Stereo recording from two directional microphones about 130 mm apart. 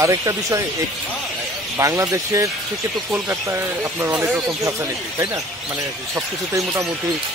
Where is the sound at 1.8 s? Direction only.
25° right (ahead or behind).